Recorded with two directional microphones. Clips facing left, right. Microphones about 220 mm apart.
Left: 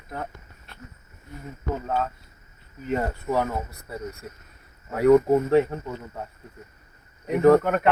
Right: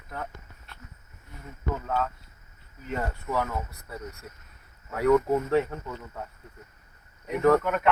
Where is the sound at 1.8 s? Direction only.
30° left (ahead or behind).